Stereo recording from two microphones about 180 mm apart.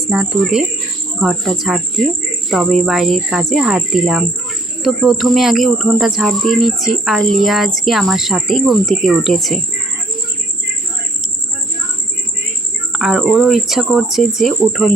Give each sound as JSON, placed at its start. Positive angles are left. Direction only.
{"t": 0.1, "sound": "speech", "side_deg": -5}
{"t": 12.9, "sound": "speech", "side_deg": 0}